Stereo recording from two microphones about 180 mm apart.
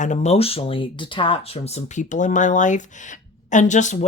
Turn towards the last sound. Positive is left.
turn(degrees=40)  # may be behind; listen again after turning